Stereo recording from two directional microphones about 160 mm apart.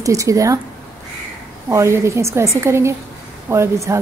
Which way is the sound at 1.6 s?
15° right (ahead or behind).